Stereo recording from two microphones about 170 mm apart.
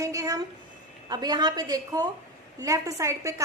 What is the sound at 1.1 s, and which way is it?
A woman's voice, 25° right (ahead or behind).